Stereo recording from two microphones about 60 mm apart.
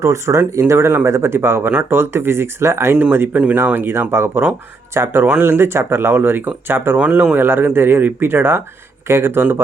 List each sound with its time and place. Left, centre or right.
0.0 s speech: right
2.9 s speech: right
7.0 s speech: right
7.3 s speech: right